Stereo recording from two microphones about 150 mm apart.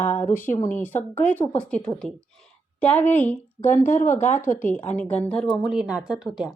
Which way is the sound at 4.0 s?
55° left (ahead or behind).